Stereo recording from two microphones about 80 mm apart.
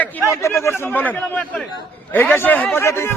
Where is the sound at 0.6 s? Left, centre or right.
Left.